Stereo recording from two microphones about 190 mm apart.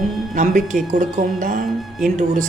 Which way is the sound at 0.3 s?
40° right (ahead or behind).